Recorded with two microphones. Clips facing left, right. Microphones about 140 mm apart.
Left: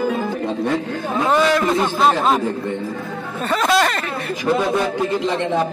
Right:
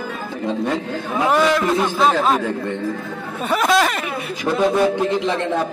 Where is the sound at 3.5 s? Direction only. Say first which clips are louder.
Even; 5° right (ahead or behind).